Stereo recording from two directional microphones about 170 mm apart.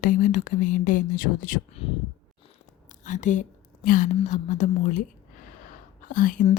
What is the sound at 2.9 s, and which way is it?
Whispering, 45° left (ahead or behind).